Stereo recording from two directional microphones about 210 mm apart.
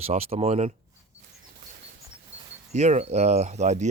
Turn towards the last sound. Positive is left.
turn(degrees=-35)  # may be behind; listen again after turning